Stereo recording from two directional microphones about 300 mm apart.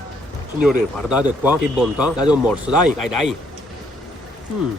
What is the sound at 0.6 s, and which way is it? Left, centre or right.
Speech, centre.